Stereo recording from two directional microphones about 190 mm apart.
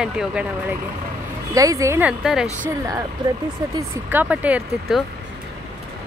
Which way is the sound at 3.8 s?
10° right (ahead or behind).